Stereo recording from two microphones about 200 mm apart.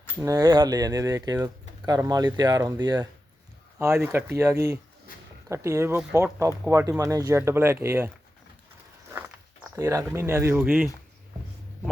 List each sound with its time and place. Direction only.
0.2 s speech: 15° right (ahead or behind)
9.7 s speech: 15° right (ahead or behind)